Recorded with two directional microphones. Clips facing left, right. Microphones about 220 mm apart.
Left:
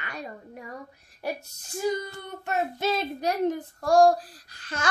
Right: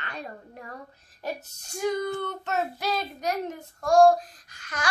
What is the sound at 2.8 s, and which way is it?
Speech, 25° left (ahead or behind).